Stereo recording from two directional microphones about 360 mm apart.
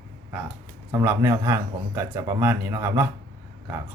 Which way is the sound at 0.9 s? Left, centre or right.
Centre.